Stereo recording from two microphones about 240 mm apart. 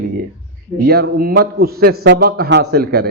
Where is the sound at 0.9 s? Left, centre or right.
Right.